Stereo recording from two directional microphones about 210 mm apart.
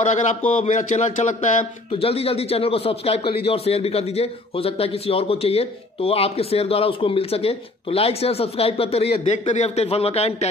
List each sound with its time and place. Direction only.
0.6 s speech: 35° left (ahead or behind)